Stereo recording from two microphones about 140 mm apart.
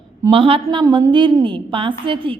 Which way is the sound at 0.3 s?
40° right (ahead or behind).